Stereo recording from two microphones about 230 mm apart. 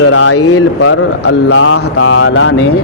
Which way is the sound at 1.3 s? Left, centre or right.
Left.